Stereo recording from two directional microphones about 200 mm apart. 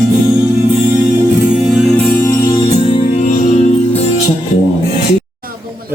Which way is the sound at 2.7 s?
30° left (ahead or behind).